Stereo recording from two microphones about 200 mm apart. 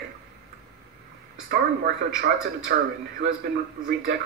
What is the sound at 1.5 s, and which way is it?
A man's voice, 50° right (ahead or behind).